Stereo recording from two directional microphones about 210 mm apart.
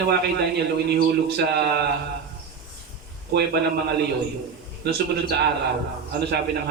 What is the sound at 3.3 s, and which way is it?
A man's voice, 50° right (ahead or behind).